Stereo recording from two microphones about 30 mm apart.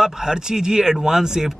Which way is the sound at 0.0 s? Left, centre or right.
Right.